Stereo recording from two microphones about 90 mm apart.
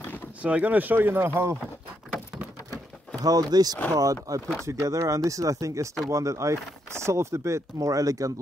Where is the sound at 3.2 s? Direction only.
45° right (ahead or behind).